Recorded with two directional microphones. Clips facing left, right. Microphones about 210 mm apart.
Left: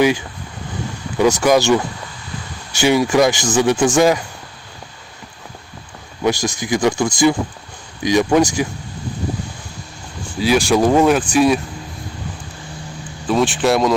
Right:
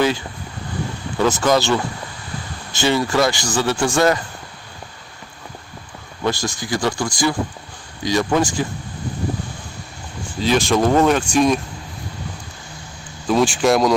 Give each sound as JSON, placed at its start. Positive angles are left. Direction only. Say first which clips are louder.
{"t": 1.2, "sound": "speech", "louder": "left 3 dB", "side_deg": 10}
{"t": 6.2, "sound": "speech", "louder": "left 4 dB", "side_deg": 15}
{"t": 10.4, "sound": "speech", "louder": "left 2 dB", "side_deg": 10}
{"t": 13.2, "sound": "speech", "louder": "even", "side_deg": 0}